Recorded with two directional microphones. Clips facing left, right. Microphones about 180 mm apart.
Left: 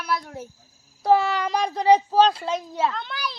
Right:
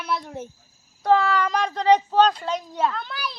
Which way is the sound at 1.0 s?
10° left (ahead or behind).